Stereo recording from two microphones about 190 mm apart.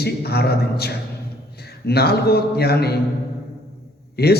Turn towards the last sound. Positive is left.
turn(degrees=55)  # may be behind; listen again after turning